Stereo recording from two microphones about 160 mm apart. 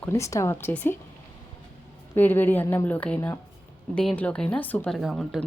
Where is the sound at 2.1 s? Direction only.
10° left (ahead or behind).